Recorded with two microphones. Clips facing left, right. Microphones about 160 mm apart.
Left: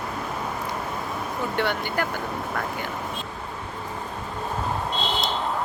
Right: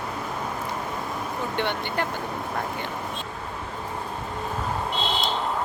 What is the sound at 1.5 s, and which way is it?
Speech, 25° right (ahead or behind).